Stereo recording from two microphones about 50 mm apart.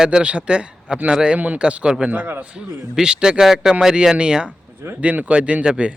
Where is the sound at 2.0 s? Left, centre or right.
Right.